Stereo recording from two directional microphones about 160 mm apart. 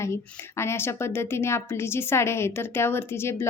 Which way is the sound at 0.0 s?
15° left (ahead or behind).